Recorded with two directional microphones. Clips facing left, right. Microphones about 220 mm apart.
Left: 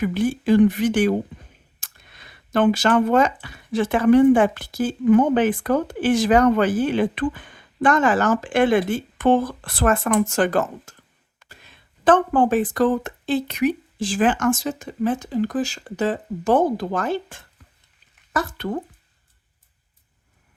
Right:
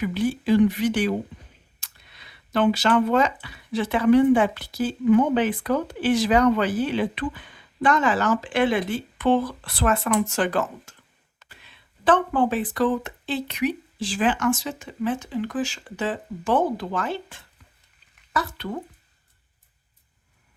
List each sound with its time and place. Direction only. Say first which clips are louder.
0.0 s speech: left 3 dB; 50° left (ahead or behind)